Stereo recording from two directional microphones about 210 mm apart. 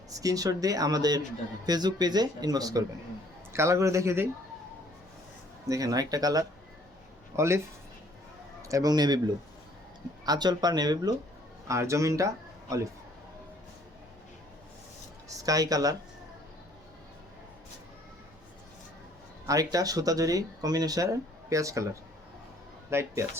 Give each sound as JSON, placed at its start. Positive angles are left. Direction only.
{"t": 0.2, "sound": "speech", "side_deg": -15}
{"t": 5.6, "sound": "speech", "side_deg": -15}
{"t": 8.6, "sound": "a man's voice", "side_deg": -15}
{"t": 15.4, "sound": "speech", "side_deg": -15}
{"t": 19.5, "sound": "speech", "side_deg": -15}
{"t": 22.9, "sound": "speech", "side_deg": -10}